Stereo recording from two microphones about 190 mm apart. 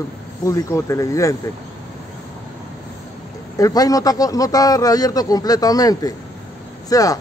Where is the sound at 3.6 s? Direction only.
20° left (ahead or behind).